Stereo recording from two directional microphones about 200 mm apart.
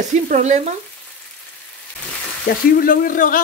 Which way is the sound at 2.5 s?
50° left (ahead or behind).